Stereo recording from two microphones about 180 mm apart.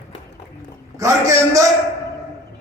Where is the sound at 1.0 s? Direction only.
15° right (ahead or behind).